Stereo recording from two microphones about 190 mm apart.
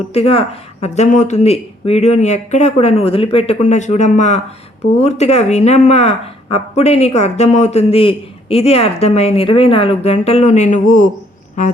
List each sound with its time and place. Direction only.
0.1 s speech: 30° left (ahead or behind)